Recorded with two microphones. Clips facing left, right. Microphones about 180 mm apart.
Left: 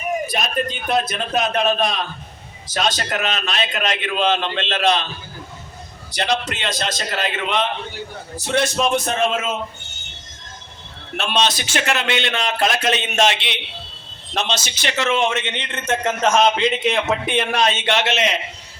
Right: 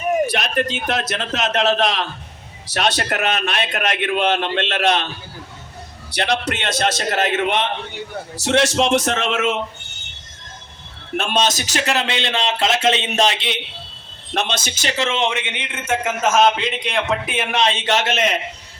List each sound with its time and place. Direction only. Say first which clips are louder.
0.3 s a man's voice: right 2 dB; 75° right (ahead or behind)
2.6 s a man's voice: right 2 dB; 65° right (ahead or behind)
6.1 s a man's voice: right 1 dB; 65° right (ahead or behind)
8.4 s a man's voice: right 3 dB; 85° right
11.2 s speech: right 1 dB; 45° right (ahead or behind)
14.3 s a man's voice: right 1 dB; 55° right (ahead or behind)
15.0 s a man's voice: left 2 dB; 20° right (ahead or behind); by 17.5 s 5° right (ahead or behind)
17.5 s speech: right 2 dB; 25° right (ahead or behind)
17.8 s a man's voice: even; 45° right (ahead or behind)